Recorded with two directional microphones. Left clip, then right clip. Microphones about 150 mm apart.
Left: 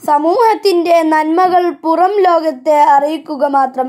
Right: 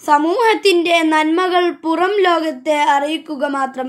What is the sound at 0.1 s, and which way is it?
A woman's voice, 10° right (ahead or behind).